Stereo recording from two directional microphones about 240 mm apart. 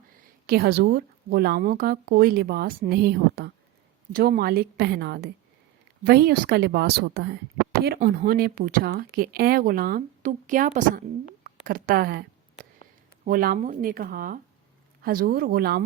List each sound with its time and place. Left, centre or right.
0.4 s speech: right
7.9 s speech: right
13.2 s speech: right